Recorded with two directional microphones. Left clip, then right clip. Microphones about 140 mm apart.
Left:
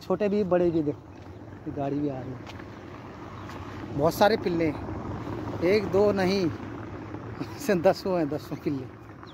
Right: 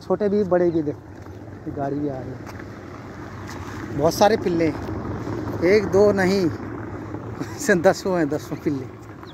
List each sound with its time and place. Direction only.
0.1 s speech: 60° left (ahead or behind)
1.8 s speech: 40° left (ahead or behind)
4.0 s speech: 35° left (ahead or behind)
4.4 s speech: 20° left (ahead or behind)
4.8 s vehicle: centre (ahead or behind)
5.7 s speech: 10° left (ahead or behind)
6.6 s vehicle: 20° left (ahead or behind)
7.1 s speech: 10° left (ahead or behind)